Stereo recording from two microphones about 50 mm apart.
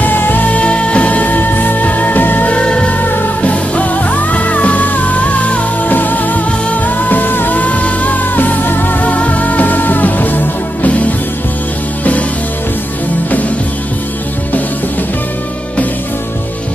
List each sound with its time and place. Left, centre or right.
0.0 s music: left
2.5 s music: left
12.0 s music: left